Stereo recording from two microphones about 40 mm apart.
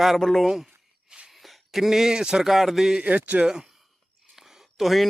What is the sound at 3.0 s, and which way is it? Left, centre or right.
Speech, right.